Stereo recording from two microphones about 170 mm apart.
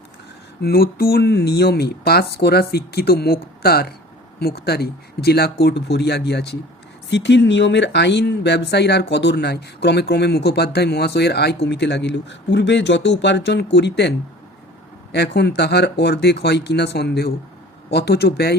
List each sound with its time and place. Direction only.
0.6 s speech: 65° left (ahead or behind)
7.1 s speech: 90° left
15.1 s speech: 75° left (ahead or behind)